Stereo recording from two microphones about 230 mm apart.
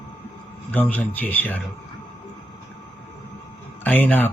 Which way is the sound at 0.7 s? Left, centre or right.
Centre.